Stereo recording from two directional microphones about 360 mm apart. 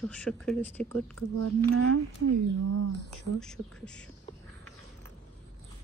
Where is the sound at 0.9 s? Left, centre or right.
Right.